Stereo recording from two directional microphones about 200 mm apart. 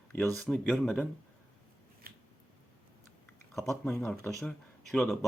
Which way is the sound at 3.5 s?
Centre (ahead or behind).